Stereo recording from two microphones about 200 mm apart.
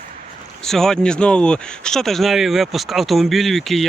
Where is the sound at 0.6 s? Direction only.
Centre (ahead or behind).